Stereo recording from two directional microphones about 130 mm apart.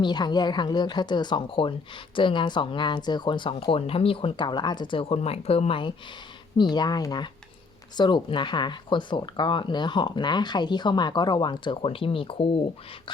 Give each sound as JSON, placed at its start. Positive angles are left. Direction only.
{"t": 0.0, "sound": "speech", "side_deg": 35}
{"t": 6.6, "sound": "speech", "side_deg": 35}